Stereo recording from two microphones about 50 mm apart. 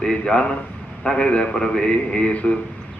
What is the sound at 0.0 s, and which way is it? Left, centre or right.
A man's voice, centre.